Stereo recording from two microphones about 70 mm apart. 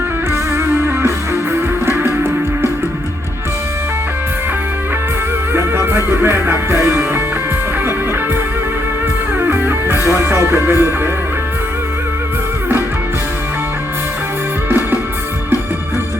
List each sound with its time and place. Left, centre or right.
0.5 s music: right
5.5 s music: right
9.4 s music: right